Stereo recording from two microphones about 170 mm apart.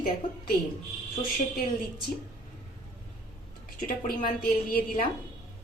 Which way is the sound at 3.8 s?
55° left (ahead or behind).